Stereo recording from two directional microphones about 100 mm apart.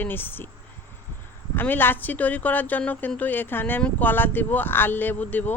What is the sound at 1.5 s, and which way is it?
Speech, 20° left (ahead or behind).